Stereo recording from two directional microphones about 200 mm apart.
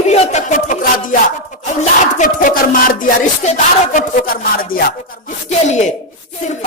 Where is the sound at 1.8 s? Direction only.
40° left (ahead or behind).